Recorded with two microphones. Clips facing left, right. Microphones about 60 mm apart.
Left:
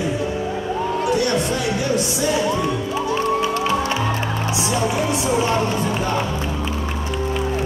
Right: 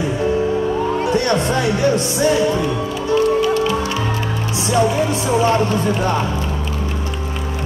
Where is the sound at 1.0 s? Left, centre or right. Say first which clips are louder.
Even; right.